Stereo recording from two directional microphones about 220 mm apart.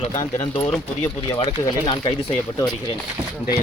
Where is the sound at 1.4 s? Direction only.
25° left (ahead or behind).